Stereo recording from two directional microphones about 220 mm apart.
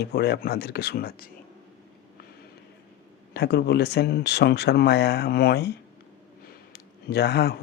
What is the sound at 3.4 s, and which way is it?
Speech, 50° left (ahead or behind).